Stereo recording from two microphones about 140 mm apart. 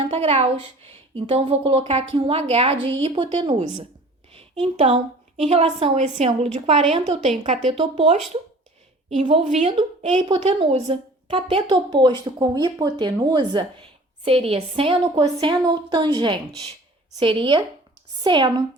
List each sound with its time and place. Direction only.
0.0 s a woman's voice: 45° right (ahead or behind)
9.4 s a woman's voice: 55° right (ahead or behind); by 13.7 s 30° right (ahead or behind)
14.3 s a woman's voice: 45° right (ahead or behind)